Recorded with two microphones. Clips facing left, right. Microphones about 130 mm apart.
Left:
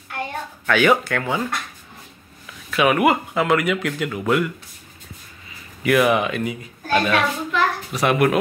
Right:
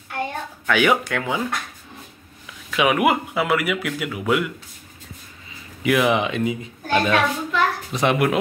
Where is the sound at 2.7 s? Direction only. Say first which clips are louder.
Left 1 dB; 15° right (ahead or behind).